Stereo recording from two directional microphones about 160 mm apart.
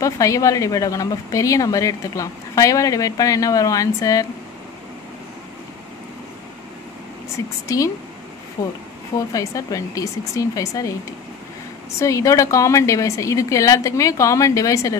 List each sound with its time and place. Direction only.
0.0 s speech: 20° left (ahead or behind)
7.6 s speech: 20° left (ahead or behind)
12.0 s speech: 20° left (ahead or behind)